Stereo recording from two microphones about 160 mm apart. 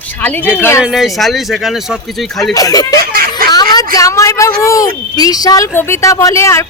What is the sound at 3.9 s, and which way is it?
Speech, 20° left (ahead or behind).